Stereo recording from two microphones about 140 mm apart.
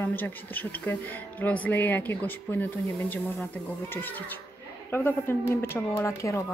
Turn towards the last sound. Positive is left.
turn(degrees=20)  # may be behind; listen again after turning